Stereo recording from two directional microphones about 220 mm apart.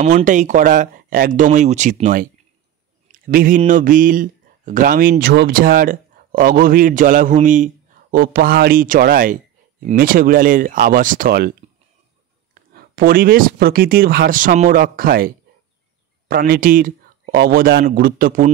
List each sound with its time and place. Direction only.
0.0 s speech: 35° right (ahead or behind)
12.7 s speech: 40° right (ahead or behind)